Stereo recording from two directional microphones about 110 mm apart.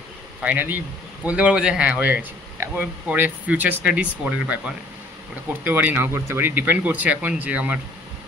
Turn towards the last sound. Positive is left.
turn(degrees=-15)  # may be behind; listen again after turning